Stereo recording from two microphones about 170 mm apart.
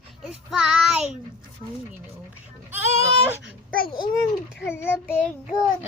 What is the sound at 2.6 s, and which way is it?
Goat, 15° right (ahead or behind).